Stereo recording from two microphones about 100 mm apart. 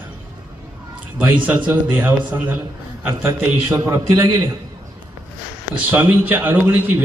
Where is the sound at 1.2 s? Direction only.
15° right (ahead or behind).